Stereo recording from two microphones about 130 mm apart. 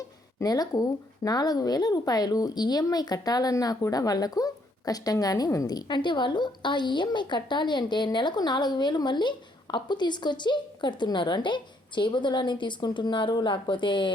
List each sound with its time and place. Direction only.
0.3 s speech: 30° left (ahead or behind)